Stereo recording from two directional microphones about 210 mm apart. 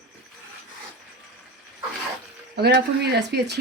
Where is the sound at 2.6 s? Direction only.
55° right (ahead or behind).